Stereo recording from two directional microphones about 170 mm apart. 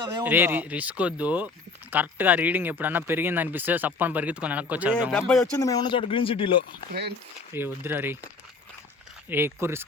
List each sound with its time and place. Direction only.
0.2 s speech: 10° right (ahead or behind)
5.1 s speech: 5° left (ahead or behind)
5.5 s speech: 20° left (ahead or behind)
7.5 s speech: 10° right (ahead or behind)
9.3 s speech: 15° right (ahead or behind)